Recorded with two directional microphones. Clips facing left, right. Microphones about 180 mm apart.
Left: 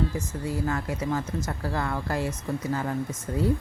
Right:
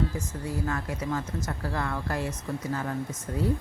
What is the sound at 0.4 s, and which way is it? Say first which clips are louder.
Speech: left 3 dB; 25° left (ahead or behind).